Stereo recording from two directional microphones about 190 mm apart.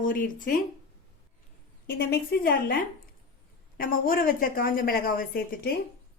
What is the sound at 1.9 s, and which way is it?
A woman's voice, 55° left (ahead or behind).